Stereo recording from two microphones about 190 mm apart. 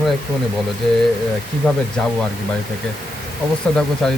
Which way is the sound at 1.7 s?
Centre (ahead or behind).